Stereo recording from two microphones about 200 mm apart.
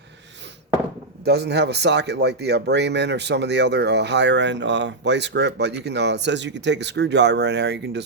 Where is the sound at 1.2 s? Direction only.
55° right (ahead or behind).